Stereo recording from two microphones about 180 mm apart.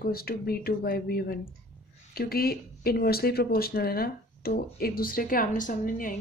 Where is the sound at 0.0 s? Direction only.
55° left (ahead or behind).